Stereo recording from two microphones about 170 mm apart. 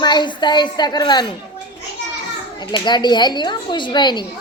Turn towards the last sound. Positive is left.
turn(degrees=25)  # may be behind; listen again after turning